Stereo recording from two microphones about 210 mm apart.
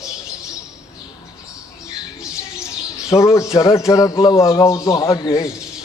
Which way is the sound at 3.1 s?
15° left (ahead or behind).